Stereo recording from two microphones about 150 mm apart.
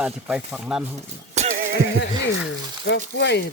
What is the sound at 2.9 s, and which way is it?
Speech, 90° left.